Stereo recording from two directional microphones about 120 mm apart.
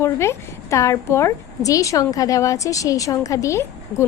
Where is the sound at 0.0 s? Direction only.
25° left (ahead or behind).